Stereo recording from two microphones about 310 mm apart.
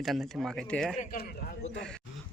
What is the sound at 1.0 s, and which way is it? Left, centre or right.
Speech, left.